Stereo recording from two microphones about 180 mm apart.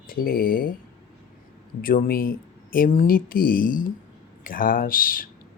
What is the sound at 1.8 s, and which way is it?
Speech, 50° left (ahead or behind).